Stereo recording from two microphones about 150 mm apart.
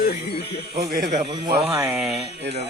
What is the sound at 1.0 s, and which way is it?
Speech, 55° right (ahead or behind).